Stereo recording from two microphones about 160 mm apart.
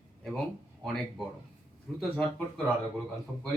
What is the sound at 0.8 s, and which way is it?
Speech, 5° left (ahead or behind).